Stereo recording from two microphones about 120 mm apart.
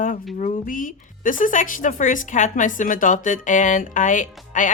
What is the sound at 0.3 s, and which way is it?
A woman's voice, 90° left.